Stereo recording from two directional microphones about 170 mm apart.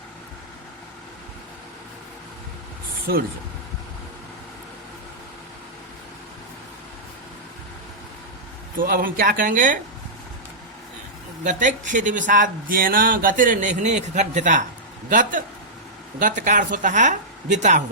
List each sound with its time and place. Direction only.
8.8 s speech: 55° right (ahead or behind)
11.4 s speech: 45° right (ahead or behind)